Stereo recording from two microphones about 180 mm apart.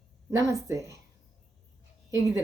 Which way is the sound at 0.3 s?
20° right (ahead or behind).